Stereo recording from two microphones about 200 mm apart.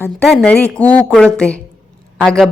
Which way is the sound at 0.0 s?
5° left (ahead or behind).